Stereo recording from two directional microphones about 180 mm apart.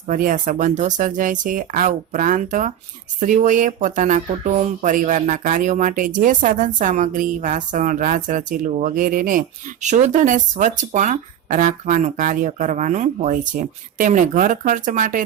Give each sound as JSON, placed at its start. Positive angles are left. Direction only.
{"t": 0.1, "sound": "speech", "side_deg": -45}